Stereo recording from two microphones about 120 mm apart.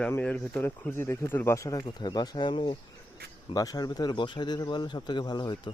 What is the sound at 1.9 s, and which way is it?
Speech, 35° left (ahead or behind).